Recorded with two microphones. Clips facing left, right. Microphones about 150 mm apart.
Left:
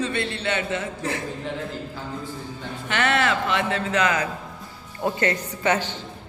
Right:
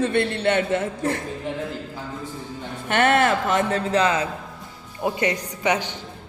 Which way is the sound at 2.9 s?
50° right (ahead or behind).